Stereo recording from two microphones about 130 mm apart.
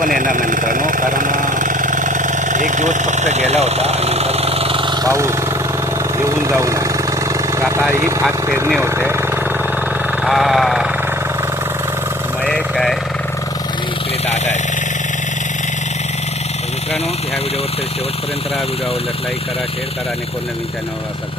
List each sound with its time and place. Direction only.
0.0 s vehicle: 90° right; by 4.9 s 45° right (ahead or behind)
5.0 s speech: 25° right (ahead or behind)
8.8 s a sound: 15° right (ahead or behind)
10.2 s speech: centre (ahead or behind)
12.5 s speech: 5° left (ahead or behind)